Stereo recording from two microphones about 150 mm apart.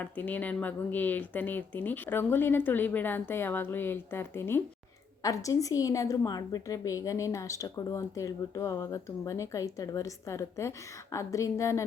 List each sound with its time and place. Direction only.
0.0 s a woman's voice: 10° left (ahead or behind)